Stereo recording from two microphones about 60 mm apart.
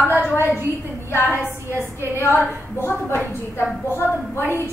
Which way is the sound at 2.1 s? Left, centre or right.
Left.